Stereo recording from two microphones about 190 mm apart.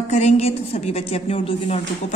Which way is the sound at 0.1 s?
35° left (ahead or behind).